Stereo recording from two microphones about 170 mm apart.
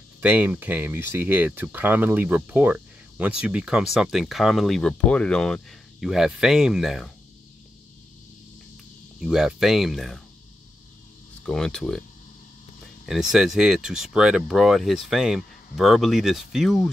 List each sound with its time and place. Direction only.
0.2 s speech: 10° right (ahead or behind)
9.2 s speech: centre (ahead or behind)
11.4 s speech: 5° left (ahead or behind)
13.0 s speech: centre (ahead or behind)